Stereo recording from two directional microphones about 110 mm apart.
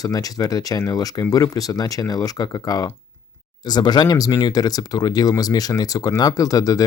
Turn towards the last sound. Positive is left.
turn(degrees=35)  # may be behind; listen again after turning